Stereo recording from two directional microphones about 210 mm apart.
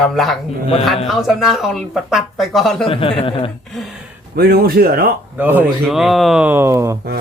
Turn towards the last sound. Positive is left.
turn(degrees=-15)  # may be behind; listen again after turning